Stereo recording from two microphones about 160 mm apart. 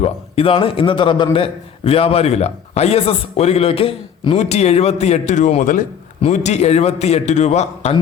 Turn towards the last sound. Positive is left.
turn(degrees=45)  # may be behind; listen again after turning